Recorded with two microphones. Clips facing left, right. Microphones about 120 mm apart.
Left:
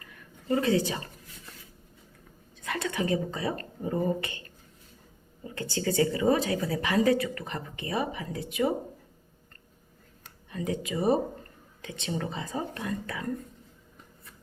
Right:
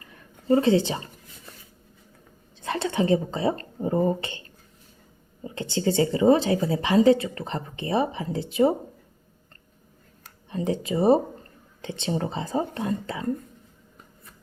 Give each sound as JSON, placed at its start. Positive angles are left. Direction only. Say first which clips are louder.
{"t": 0.0, "sound": "a sound", "louder": "right 4 dB", "side_deg": -30}
{"t": 2.6, "sound": "a woman's voice", "louder": "right 5 dB", "side_deg": -30}
{"t": 10.5, "sound": "a woman's voice", "louder": "right 5 dB", "side_deg": -30}